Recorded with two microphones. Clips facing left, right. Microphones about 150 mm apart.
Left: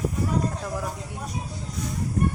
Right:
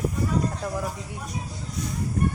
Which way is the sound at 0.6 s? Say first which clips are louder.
Right 1 dB; 5° right (ahead or behind).